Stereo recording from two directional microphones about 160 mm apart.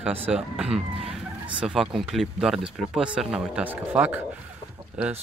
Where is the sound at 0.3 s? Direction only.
5° right (ahead or behind).